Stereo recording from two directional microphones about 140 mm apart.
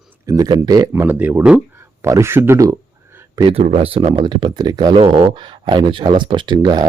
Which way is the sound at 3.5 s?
50° right (ahead or behind).